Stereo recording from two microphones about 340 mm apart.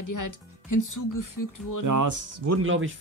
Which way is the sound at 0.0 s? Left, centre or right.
Left.